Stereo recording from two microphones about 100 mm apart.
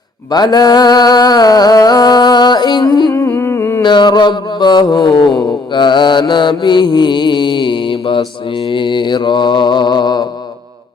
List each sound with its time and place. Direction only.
0.3 s music: 45° left (ahead or behind)
3.1 s humming: 25° left (ahead or behind)
3.8 s mantra: 50° left (ahead or behind)